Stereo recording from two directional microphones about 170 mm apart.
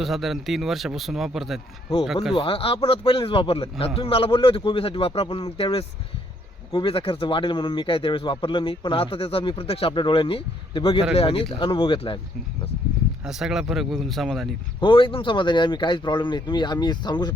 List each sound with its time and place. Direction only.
0.0 s speech: centre (ahead or behind)
2.3 s speech: 30° left (ahead or behind)
13.2 s speech: 5° right (ahead or behind)
14.8 s speech: 30° left (ahead or behind)